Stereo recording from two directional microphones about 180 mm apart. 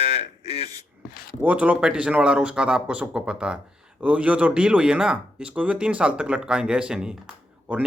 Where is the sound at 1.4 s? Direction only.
10° right (ahead or behind).